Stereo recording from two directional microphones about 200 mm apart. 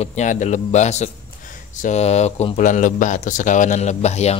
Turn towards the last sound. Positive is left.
turn(degrees=35)  # may be behind; listen again after turning